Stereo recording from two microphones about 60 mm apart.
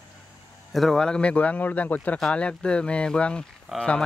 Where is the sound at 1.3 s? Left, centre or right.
Left.